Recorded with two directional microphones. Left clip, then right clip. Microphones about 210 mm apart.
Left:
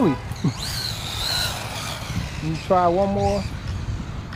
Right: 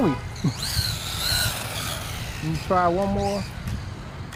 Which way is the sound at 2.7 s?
15° left (ahead or behind).